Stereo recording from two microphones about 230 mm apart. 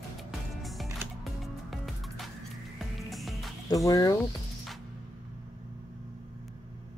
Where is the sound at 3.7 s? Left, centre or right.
Centre.